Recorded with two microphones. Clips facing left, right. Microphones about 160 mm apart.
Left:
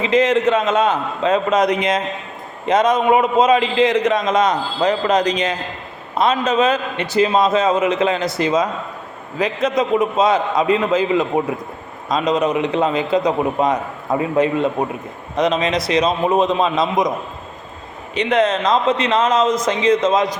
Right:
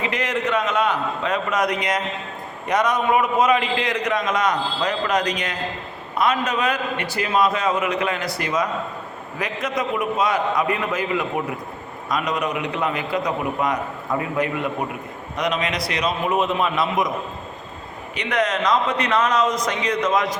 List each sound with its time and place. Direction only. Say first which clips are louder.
0.0 s a man's voice: left 9 dB; 25° left (ahead or behind)
18.1 s a man's voice: left 6 dB; 25° left (ahead or behind)